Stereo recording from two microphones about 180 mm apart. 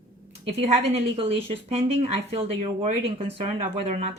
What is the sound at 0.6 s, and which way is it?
Speech, 35° right (ahead or behind).